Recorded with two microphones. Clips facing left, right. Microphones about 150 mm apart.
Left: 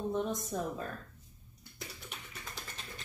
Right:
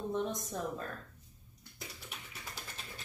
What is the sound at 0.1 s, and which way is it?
Speech, 5° left (ahead or behind).